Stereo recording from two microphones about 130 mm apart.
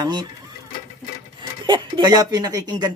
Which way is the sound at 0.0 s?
35° right (ahead or behind).